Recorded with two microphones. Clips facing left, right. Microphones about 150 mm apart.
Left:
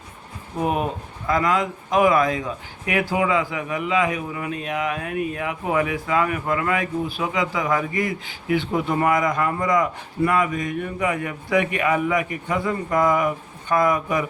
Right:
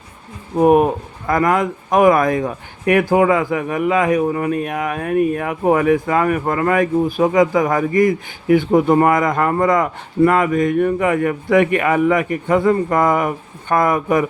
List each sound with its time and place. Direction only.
0.6 s speech: 50° right (ahead or behind)